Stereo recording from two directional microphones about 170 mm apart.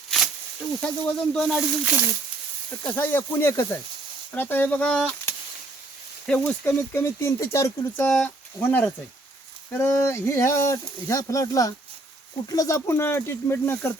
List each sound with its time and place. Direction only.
1.2 s speech: 5° left (ahead or behind)
2.8 s speech: 10° left (ahead or behind)